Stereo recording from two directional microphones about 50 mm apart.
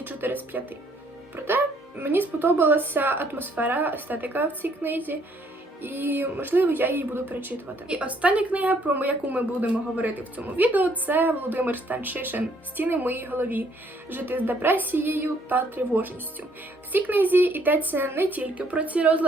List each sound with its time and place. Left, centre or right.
0.0 s a woman's voice: right
7.9 s a woman's voice: right
18.4 s speech: right